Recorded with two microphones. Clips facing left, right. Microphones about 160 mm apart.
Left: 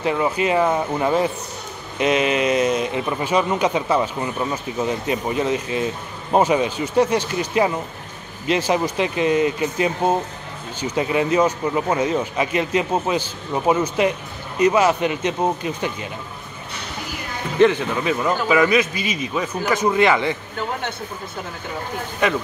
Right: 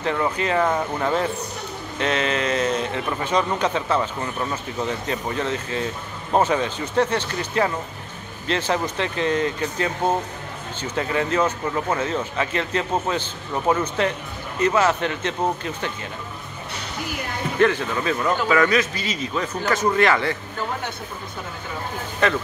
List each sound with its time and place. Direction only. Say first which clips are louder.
0.0 s speech: left 3 dB; 10° left (ahead or behind)
17.6 s speech: left 4 dB; 15° left (ahead or behind)